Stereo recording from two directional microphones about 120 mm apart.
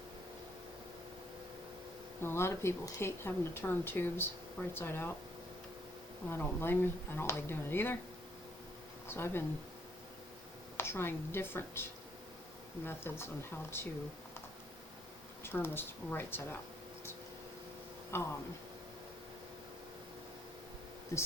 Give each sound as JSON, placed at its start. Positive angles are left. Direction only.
{"t": 2.2, "sound": "speech", "side_deg": 20}
{"t": 6.2, "sound": "speech", "side_deg": 20}
{"t": 9.0, "sound": "speech", "side_deg": 20}
{"t": 10.8, "sound": "speech", "side_deg": 20}
{"t": 15.4, "sound": "speech", "side_deg": 20}
{"t": 18.1, "sound": "speech", "side_deg": 20}